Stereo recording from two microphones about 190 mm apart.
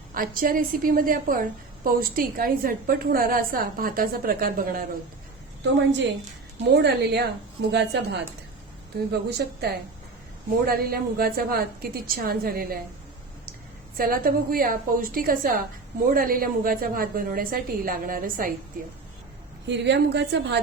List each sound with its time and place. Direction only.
0.1 s a woman's voice: 45° right (ahead or behind)
6.7 s a woman's voice: 60° right (ahead or behind)
13.9 s a woman's voice: 50° right (ahead or behind)
19.6 s a woman's voice: 65° right (ahead or behind)